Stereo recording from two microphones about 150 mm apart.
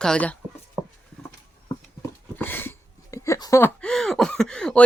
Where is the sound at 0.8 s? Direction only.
15° right (ahead or behind).